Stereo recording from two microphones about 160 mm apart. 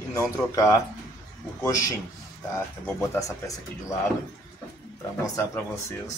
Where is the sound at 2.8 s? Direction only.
15° left (ahead or behind).